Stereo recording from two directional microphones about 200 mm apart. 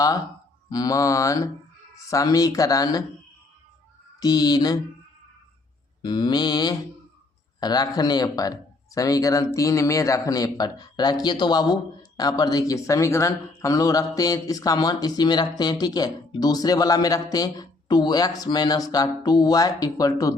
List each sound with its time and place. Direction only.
0.7 s speech: 15° left (ahead or behind)
4.2 s speech: 20° left (ahead or behind)
6.0 s speech: 20° left (ahead or behind)